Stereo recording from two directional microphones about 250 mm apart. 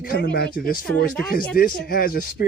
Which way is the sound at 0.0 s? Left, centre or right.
Left.